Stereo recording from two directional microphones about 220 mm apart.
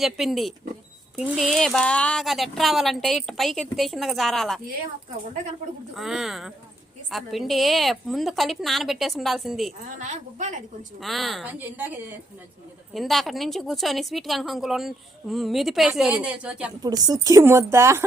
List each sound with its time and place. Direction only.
0.0 s a woman's voice: centre (ahead or behind)
5.9 s a woman's voice: centre (ahead or behind)
10.0 s a woman's voice: 35° right (ahead or behind)
11.0 s a woman's voice: centre (ahead or behind)
12.9 s a woman's voice: centre (ahead or behind)
16.8 s speech: 15° right (ahead or behind)